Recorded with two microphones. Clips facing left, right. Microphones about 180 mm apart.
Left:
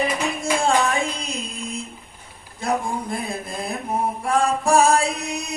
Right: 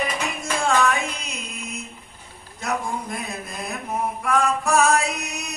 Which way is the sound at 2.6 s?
30° left (ahead or behind).